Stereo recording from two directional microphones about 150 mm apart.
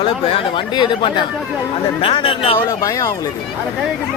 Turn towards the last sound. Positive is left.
turn(degrees=20)  # may be behind; listen again after turning